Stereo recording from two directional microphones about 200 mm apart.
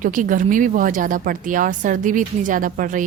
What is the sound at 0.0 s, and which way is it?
A woman's voice, 40° right (ahead or behind).